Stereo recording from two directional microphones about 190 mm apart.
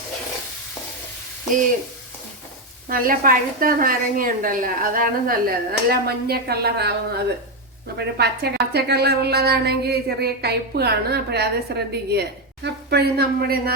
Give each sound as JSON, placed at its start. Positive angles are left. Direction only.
{"t": 2.9, "sound": "a woman's voice", "side_deg": -50}